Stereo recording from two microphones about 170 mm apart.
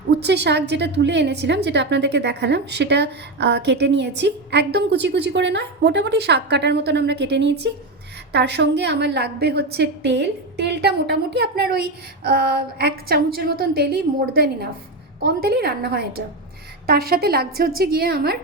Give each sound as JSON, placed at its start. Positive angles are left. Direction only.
{"t": 0.1, "sound": "a woman's voice", "side_deg": -80}